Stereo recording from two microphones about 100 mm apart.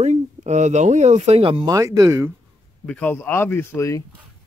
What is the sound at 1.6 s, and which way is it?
Speech, 35° right (ahead or behind).